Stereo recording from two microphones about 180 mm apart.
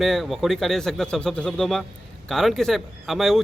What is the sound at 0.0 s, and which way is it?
Speech, centre (ahead or behind).